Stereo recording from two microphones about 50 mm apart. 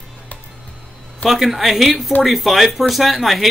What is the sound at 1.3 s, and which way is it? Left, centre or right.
Speech, centre.